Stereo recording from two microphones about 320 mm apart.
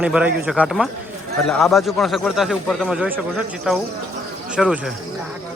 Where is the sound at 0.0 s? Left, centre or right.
Centre.